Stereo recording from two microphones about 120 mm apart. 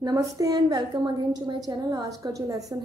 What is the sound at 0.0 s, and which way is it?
Speech, 30° right (ahead or behind).